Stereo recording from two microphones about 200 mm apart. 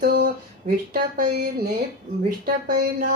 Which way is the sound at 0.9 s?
50° right (ahead or behind).